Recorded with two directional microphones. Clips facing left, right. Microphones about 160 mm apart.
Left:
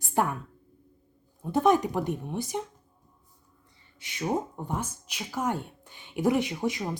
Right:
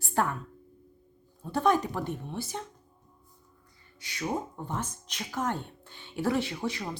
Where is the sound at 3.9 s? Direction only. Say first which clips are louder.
Left 3 dB; 20° left (ahead or behind).